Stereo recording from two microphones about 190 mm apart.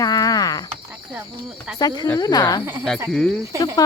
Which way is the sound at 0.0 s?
20° left (ahead or behind).